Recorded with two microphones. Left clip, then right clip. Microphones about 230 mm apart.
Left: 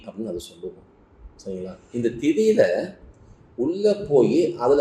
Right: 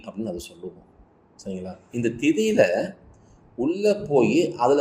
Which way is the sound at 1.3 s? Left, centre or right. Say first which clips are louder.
Left 2 dB; right.